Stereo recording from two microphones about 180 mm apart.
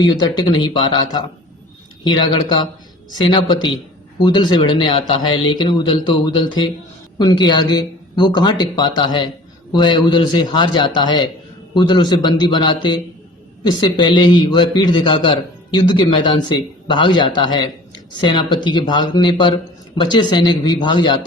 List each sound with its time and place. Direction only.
0.0 s a man's voice: 25° left (ahead or behind)